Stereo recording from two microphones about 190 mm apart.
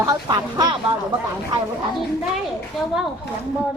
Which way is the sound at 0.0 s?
20° right (ahead or behind).